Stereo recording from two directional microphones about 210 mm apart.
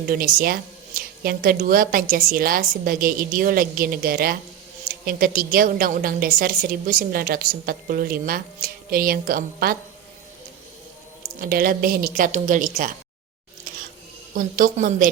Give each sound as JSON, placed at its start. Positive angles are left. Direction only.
{"t": 0.1, "sound": "a woman's voice", "side_deg": -45}
{"t": 11.3, "sound": "a woman's voice", "side_deg": -45}
{"t": 14.3, "sound": "a woman's voice", "side_deg": -40}